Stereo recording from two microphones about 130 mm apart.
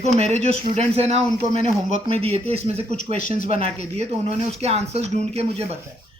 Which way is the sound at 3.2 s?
90° left.